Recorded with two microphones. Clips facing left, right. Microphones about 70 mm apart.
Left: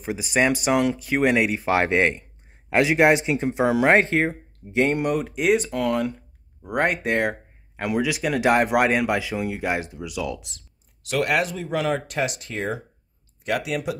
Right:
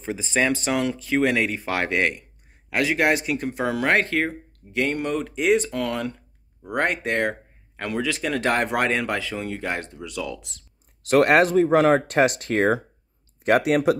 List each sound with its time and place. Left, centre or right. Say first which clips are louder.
0.0 s speech: left 2 dB; centre
11.1 s speech: right 6 dB; right